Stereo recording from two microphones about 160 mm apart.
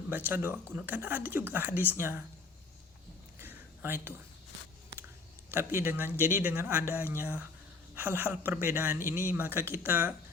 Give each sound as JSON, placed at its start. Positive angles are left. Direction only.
{"t": 0.3, "sound": "speech", "side_deg": -10}
{"t": 3.3, "sound": "a sound", "side_deg": -15}
{"t": 5.5, "sound": "speech", "side_deg": -15}